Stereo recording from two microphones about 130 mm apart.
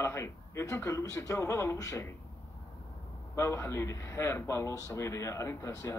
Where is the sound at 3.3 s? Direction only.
20° left (ahead or behind).